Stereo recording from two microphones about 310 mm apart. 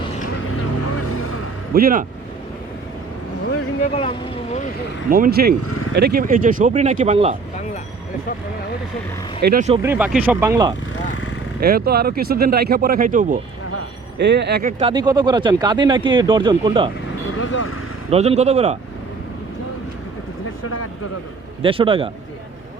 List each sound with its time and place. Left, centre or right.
1.7 s speech: right
5.0 s speech: right
9.4 s speech: right
9.8 s speech: centre
11.6 s speech: right
17.3 s vehicle: left
18.1 s speech: centre
21.6 s speech: centre